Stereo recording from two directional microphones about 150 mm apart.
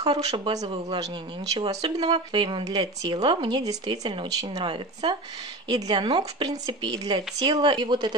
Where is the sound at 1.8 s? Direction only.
40° right (ahead or behind).